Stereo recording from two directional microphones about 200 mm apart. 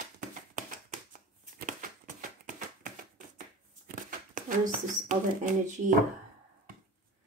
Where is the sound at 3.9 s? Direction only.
40° right (ahead or behind).